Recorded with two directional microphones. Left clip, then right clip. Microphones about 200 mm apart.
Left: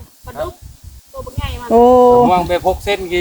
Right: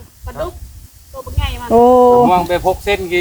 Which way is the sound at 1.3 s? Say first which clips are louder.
Right 5 dB; 50° right (ahead or behind).